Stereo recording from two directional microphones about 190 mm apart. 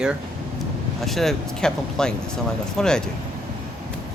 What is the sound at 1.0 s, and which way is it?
Speech, centre (ahead or behind).